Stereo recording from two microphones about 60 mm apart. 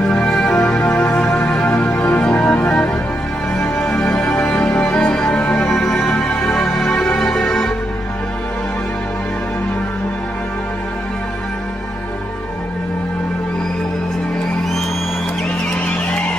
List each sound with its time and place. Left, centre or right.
0.1 s music: centre
5.7 s music: centre